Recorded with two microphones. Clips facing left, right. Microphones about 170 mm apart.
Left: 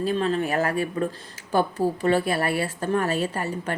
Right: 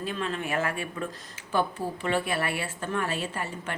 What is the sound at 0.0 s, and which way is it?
A woman's voice, 35° left (ahead or behind).